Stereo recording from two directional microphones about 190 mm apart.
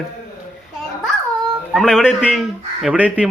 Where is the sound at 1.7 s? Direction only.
5° right (ahead or behind).